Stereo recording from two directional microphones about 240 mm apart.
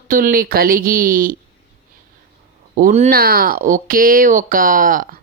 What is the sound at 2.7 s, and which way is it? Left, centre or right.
Speech, right.